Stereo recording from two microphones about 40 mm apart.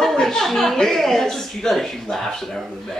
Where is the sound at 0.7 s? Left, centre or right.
Centre.